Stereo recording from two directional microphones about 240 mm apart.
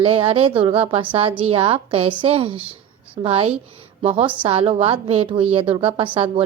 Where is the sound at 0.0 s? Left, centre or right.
Right.